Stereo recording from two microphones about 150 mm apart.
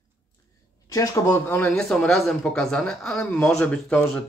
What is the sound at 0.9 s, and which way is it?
Speech, 20° left (ahead or behind).